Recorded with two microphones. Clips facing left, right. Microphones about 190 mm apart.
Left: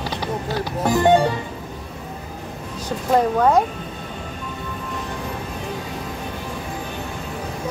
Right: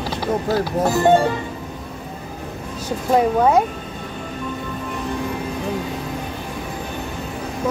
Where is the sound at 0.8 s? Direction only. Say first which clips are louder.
Even; 5° right (ahead or behind).